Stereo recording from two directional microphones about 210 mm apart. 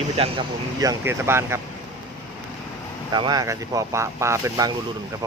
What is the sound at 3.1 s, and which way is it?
Speech, 20° right (ahead or behind).